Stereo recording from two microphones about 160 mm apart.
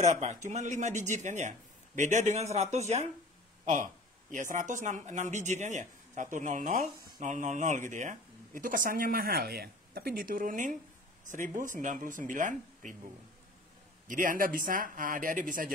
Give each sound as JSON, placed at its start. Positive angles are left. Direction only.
{"t": 0.0, "sound": "speech", "side_deg": -50}
{"t": 14.0, "sound": "speech", "side_deg": -55}